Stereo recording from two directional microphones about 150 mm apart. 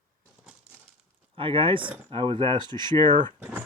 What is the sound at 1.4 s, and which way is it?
Speech, 35° right (ahead or behind).